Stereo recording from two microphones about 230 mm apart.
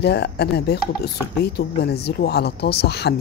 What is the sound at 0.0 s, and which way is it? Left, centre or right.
Speech, left.